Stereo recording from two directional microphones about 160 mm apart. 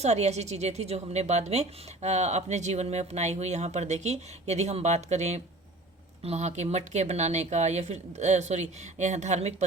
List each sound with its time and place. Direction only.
0.0 s a woman's voice: 45° right (ahead or behind)